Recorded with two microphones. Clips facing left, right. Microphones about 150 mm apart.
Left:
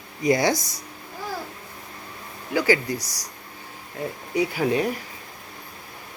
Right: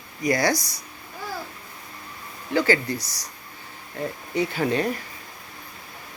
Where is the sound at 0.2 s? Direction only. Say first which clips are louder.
Left 2 dB; 25° left (ahead or behind).